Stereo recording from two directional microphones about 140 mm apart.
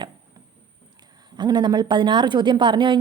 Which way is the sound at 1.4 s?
30° right (ahead or behind).